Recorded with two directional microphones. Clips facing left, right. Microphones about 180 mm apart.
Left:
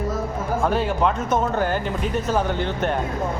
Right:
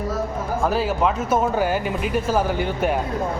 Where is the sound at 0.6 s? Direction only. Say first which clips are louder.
Right 1 dB; 5° right (ahead or behind).